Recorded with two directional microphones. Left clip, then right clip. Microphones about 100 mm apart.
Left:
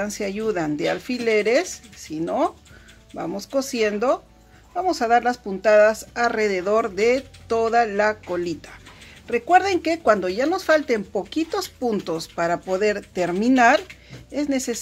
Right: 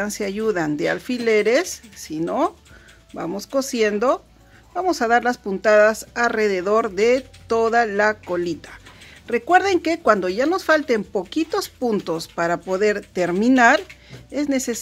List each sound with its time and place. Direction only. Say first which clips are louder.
0.0 s speech: right 2 dB; 25° right (ahead or behind)